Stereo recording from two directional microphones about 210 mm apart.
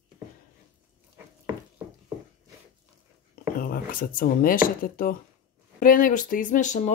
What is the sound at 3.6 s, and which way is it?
Speech, 40° left (ahead or behind).